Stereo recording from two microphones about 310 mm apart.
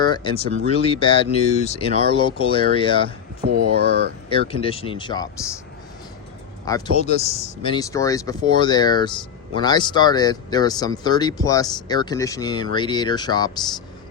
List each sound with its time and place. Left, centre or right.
0.0 s speech: centre
3.5 s speech: right
4.3 s speech: centre
6.7 s speech: centre